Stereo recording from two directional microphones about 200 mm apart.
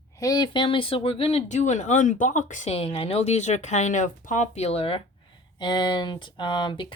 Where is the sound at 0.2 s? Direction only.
20° left (ahead or behind).